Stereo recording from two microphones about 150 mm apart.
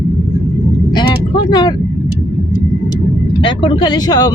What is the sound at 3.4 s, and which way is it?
Speech, 35° left (ahead or behind).